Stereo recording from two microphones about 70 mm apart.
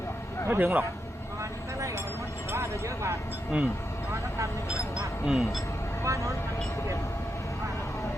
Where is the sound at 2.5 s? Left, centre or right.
Right.